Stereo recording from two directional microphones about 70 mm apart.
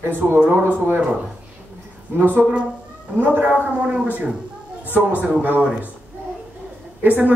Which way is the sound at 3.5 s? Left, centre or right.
Centre.